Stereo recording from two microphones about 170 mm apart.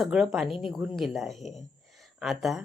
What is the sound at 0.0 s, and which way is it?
A woman's voice, centre (ahead or behind).